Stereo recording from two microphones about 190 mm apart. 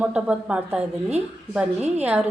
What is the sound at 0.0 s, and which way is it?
A woman's voice, 5° right (ahead or behind).